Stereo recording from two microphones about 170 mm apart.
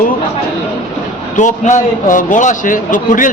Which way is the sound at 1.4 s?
45° left (ahead or behind).